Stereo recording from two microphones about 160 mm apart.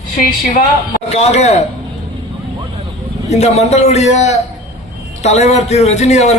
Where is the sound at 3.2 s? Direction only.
45° left (ahead or behind).